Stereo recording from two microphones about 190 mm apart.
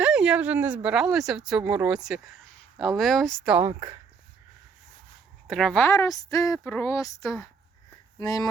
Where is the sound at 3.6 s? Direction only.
15° right (ahead or behind).